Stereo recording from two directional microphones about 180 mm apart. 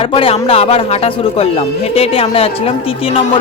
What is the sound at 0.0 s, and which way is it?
Speech, 30° left (ahead or behind).